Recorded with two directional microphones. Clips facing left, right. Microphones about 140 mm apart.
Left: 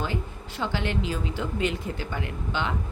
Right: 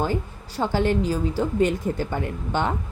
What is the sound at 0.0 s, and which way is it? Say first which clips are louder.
Speech: right 5 dB; 45° right (ahead or behind).